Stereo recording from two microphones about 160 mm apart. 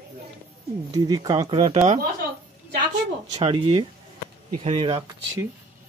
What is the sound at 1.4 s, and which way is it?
Speech, 40° right (ahead or behind).